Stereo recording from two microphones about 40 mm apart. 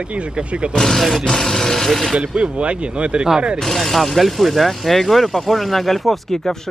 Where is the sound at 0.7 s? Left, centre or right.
Centre.